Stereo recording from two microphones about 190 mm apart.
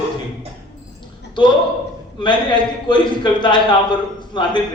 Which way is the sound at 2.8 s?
25° left (ahead or behind).